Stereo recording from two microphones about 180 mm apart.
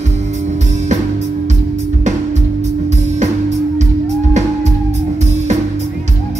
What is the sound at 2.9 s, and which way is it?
Music, 40° right (ahead or behind).